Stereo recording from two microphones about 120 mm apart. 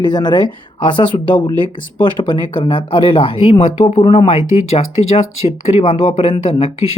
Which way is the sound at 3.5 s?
90° left.